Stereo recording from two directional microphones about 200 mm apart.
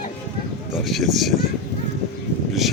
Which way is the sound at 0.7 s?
Centre (ahead or behind).